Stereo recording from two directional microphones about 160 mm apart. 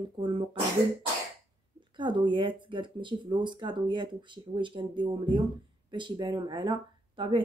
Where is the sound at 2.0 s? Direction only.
30° right (ahead or behind).